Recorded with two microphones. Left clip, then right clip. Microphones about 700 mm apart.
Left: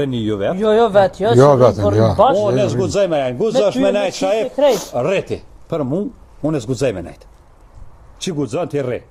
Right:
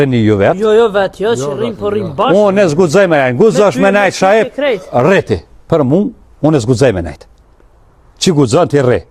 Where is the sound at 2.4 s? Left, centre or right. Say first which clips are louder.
Right 7 dB; right.